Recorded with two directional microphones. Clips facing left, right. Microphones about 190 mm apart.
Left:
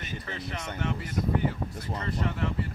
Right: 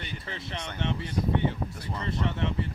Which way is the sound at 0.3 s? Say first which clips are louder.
Even; 25° right (ahead or behind).